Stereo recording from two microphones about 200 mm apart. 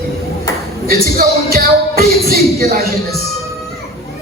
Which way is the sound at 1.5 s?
50° right (ahead or behind).